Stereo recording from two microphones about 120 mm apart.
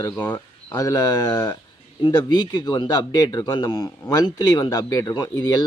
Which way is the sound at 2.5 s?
35° left (ahead or behind).